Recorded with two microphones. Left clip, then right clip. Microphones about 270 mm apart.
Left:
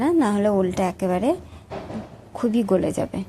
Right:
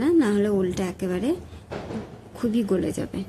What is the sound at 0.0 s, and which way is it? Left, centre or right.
A woman's voice, centre.